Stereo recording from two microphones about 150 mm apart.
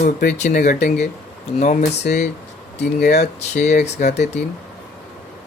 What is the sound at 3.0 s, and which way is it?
Speech, 50° left (ahead or behind).